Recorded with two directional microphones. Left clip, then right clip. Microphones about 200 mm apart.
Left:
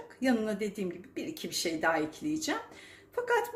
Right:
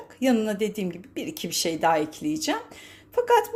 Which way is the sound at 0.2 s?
35° right (ahead or behind).